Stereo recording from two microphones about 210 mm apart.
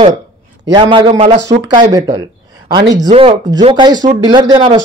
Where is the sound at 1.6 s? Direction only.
20° right (ahead or behind).